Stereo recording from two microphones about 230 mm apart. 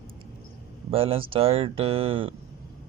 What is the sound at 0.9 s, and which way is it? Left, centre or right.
A man's voice, right.